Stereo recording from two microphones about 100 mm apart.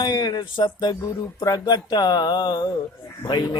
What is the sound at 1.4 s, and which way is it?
Speech, 40° left (ahead or behind).